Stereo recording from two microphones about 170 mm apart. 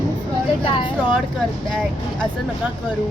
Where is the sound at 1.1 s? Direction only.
Centre (ahead or behind).